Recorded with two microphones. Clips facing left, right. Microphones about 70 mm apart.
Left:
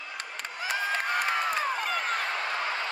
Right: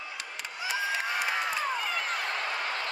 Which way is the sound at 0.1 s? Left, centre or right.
Left.